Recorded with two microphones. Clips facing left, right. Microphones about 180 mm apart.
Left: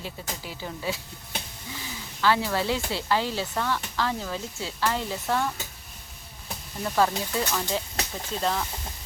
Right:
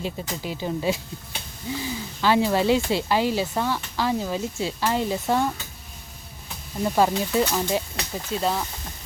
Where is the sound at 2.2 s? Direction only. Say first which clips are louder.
Right 5 dB; 15° right (ahead or behind).